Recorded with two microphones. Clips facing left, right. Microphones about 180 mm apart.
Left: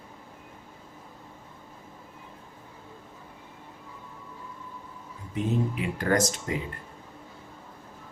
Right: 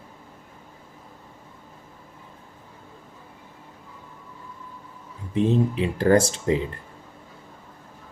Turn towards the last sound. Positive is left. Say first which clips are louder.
# right 6 dB
turn(degrees=-30)  # may be behind; listen again after turning